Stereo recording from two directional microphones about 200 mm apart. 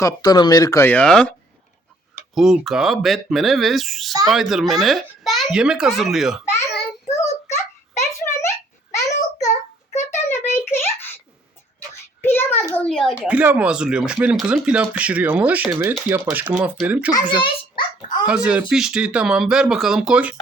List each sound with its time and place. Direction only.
0.0 s speech: 20° left (ahead or behind); by 1.3 s 5° left (ahead or behind)
2.3 s speech: centre (ahead or behind)
7.2 s a sound: 15° left (ahead or behind)
9.4 s child singing: 35° left (ahead or behind)
10.1 s a sound: 10° left (ahead or behind)
12.2 s child singing: 10° left (ahead or behind)
12.7 s speech: 5° left (ahead or behind)
17.1 s a child's voice: 20° left (ahead or behind)
18.3 s speech: 5° right (ahead or behind)